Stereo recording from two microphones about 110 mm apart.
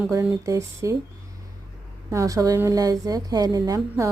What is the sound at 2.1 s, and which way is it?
Speech, 30° right (ahead or behind).